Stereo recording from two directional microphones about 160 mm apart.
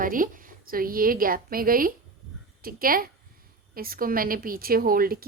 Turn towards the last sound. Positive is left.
turn(degrees=-65)  # may be behind; listen again after turning